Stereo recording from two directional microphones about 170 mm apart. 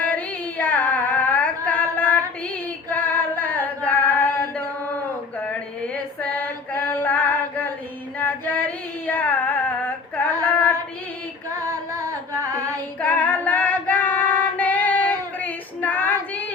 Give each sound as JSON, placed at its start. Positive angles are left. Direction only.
{"t": 0.0, "sound": "singing", "side_deg": 10}
{"t": 2.9, "sound": "a sound", "side_deg": 10}
{"t": 5.4, "sound": "female singing", "side_deg": 10}
{"t": 8.2, "sound": "a sound", "side_deg": 10}
{"t": 11.7, "sound": "carnatic music", "side_deg": -20}
{"t": 13.0, "sound": "female singing", "side_deg": 10}